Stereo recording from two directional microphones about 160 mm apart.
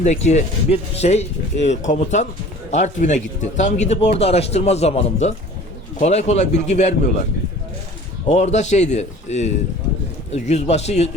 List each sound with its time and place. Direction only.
0.0 s speech: 45° left (ahead or behind)
8.3 s speech: 45° left (ahead or behind)